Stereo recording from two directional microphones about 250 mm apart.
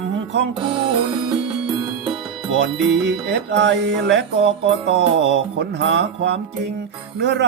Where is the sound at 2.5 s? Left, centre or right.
Right.